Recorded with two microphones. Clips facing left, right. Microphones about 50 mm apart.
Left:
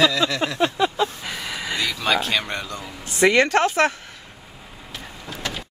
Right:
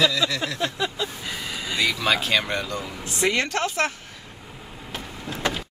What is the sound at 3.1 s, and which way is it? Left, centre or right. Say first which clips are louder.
Speech: left 7 dB; left.